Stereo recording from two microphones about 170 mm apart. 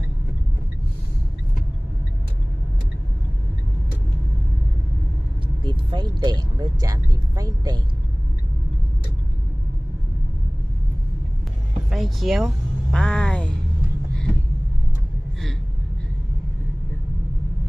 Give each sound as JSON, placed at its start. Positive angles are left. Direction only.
{"t": 5.6, "sound": "speech", "side_deg": -25}
{"t": 11.9, "sound": "speech", "side_deg": 0}
{"t": 12.9, "sound": "music", "side_deg": 5}